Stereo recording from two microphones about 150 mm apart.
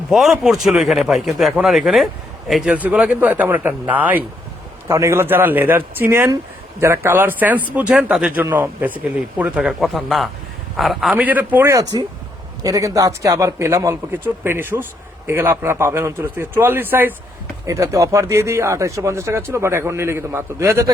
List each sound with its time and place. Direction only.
0.1 s a man's voice: centre (ahead or behind); by 20.9 s 20° right (ahead or behind)